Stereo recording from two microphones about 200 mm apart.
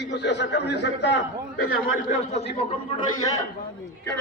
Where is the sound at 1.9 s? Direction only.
40° left (ahead or behind).